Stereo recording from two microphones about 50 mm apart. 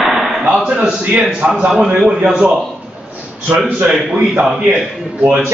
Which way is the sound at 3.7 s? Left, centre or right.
Right.